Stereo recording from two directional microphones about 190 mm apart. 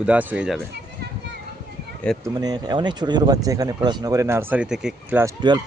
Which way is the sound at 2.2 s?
20° right (ahead or behind).